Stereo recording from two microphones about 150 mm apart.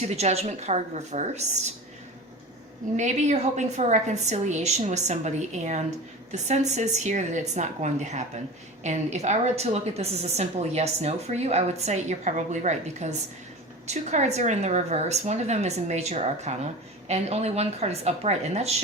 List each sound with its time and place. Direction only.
0.2 s a woman's voice: 45° right (ahead or behind)
2.9 s a woman's voice: 50° right (ahead or behind)